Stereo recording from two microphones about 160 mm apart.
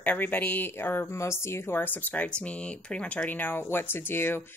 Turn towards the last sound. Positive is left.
turn(degrees=15)  # may be behind; listen again after turning